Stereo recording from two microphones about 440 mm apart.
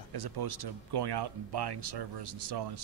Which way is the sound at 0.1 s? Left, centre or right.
Right.